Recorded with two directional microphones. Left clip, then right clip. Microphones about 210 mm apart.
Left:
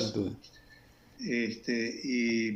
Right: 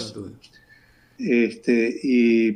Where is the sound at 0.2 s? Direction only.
20° left (ahead or behind).